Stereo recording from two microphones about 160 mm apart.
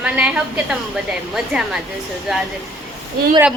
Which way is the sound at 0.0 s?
10° right (ahead or behind).